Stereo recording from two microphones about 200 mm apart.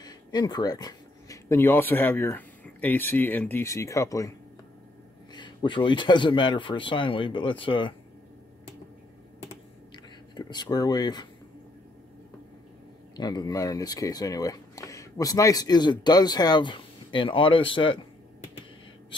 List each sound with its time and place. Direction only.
0.0 s speech: 20° left (ahead or behind)
5.3 s speech: 25° left (ahead or behind)
9.9 s speech: 20° left (ahead or behind)
13.1 s speech: 20° left (ahead or behind)